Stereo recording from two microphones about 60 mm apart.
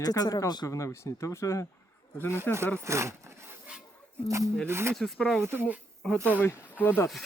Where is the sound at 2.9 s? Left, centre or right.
Right.